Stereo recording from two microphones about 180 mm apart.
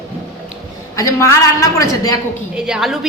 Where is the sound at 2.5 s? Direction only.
5° right (ahead or behind).